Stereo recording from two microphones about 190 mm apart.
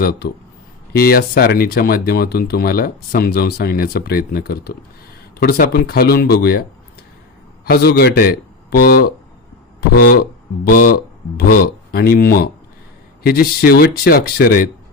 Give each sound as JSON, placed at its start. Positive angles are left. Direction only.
{"t": 0.0, "sound": "speech", "side_deg": 55}